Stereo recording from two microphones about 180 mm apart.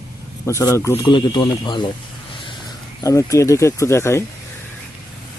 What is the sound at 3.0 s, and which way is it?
Speech, 15° left (ahead or behind).